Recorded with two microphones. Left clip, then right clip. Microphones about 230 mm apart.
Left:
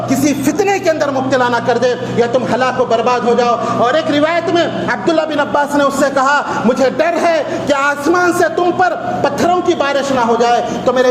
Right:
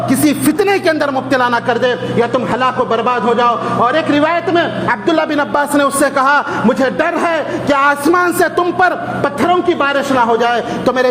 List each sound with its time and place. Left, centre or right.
0.1 s speech: right